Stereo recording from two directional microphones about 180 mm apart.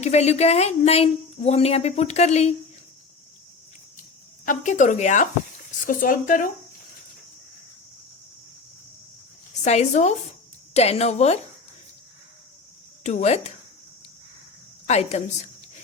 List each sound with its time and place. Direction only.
0.0 s a woman's voice: 35° left (ahead or behind)
4.4 s speech: 40° left (ahead or behind)
9.6 s a woman's voice: 40° left (ahead or behind)
13.0 s a woman's voice: 40° left (ahead or behind)
14.8 s a woman's voice: 40° left (ahead or behind)